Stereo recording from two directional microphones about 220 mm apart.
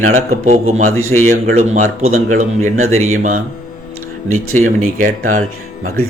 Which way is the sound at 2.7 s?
70° right (ahead or behind).